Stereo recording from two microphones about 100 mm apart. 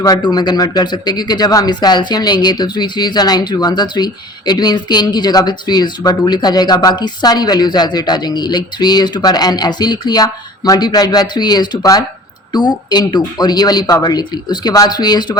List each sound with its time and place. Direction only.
0.0 s a man's voice: 40° left (ahead or behind)